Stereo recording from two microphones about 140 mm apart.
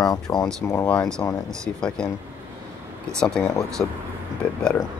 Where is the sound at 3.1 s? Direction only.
5° left (ahead or behind).